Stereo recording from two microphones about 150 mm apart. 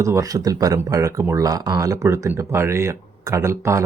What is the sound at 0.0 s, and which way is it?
Speech, 20° right (ahead or behind).